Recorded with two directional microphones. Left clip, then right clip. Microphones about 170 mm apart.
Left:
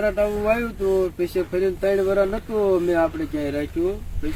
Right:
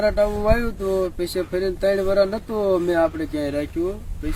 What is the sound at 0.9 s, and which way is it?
Speech, 30° right (ahead or behind).